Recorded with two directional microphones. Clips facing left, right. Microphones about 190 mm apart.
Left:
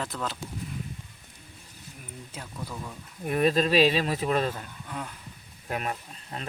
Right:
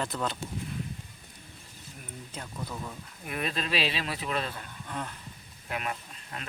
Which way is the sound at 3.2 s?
40° left (ahead or behind).